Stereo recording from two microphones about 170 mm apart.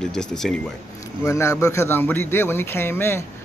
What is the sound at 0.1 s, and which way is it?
Speech, 5° left (ahead or behind).